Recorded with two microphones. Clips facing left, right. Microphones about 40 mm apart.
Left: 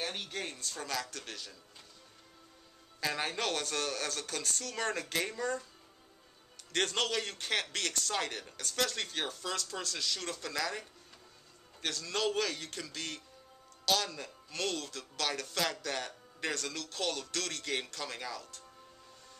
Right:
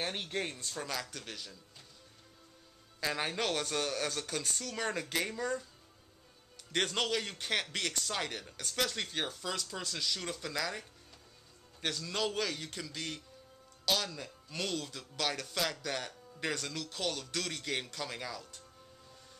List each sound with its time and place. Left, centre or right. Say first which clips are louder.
0.0 s speech: right 2 dB; centre
3.0 s speech: even; centre
6.7 s speech: even; centre